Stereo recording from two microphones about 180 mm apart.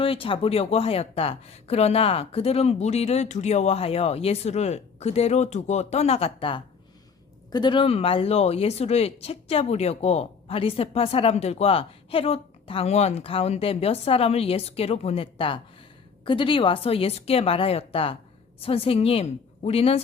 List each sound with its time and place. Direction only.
0.0 s speech: 30° left (ahead or behind)